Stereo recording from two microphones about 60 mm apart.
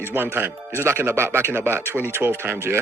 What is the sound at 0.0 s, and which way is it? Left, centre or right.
Speech, right.